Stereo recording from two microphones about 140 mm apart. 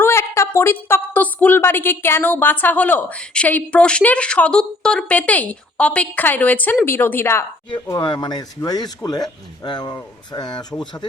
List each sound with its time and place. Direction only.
0.0 s a woman's voice: 20° left (ahead or behind)
7.9 s speech: 30° left (ahead or behind)